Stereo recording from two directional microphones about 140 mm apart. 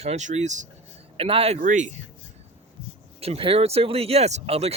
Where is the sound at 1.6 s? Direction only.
65° right (ahead or behind).